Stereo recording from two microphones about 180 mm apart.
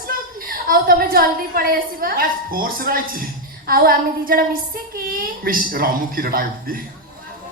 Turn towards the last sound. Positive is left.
turn(degrees=-55)  # may be behind; listen again after turning